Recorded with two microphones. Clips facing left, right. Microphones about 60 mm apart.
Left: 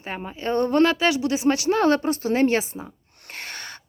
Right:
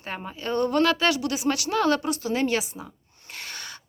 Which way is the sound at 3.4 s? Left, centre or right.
Left.